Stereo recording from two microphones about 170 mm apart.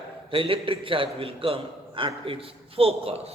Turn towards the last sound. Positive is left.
turn(degrees=-35)  # may be behind; listen again after turning